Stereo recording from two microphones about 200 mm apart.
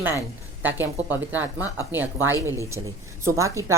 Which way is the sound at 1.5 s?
10° right (ahead or behind).